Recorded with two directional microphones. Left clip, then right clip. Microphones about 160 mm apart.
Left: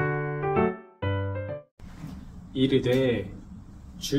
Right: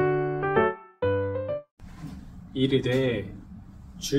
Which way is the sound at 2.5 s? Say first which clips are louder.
Left 1 dB; 5° left (ahead or behind).